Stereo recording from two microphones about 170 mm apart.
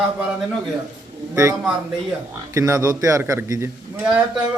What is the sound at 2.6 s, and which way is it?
A man's voice, 20° right (ahead or behind).